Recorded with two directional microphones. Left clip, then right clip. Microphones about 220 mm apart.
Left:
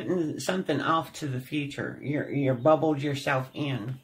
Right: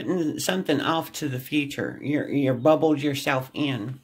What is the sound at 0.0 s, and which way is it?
Speech, 40° right (ahead or behind).